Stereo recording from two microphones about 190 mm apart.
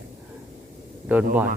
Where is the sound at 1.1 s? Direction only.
5° right (ahead or behind).